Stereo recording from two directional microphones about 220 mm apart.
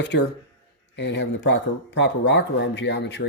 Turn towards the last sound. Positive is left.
turn(degrees=55)  # may be behind; listen again after turning